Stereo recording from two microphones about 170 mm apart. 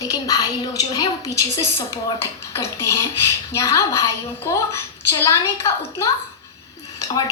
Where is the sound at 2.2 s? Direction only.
15° left (ahead or behind).